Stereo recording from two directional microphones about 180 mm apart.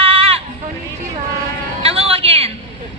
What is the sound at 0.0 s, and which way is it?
Sheep, 30° right (ahead or behind).